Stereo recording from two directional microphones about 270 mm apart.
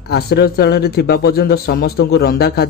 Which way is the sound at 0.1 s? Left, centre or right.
Left.